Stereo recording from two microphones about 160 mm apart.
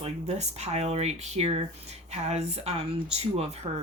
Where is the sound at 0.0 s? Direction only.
45° right (ahead or behind).